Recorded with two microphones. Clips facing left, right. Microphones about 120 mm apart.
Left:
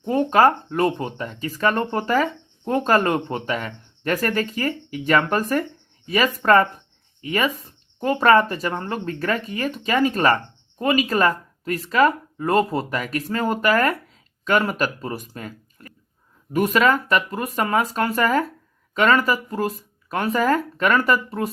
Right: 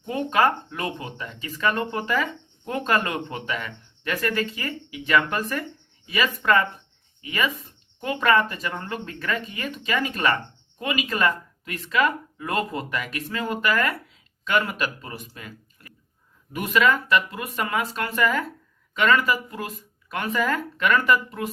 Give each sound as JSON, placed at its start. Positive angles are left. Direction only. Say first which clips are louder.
{"t": 0.0, "sound": "speech", "louder": "left 5 dB", "side_deg": 35}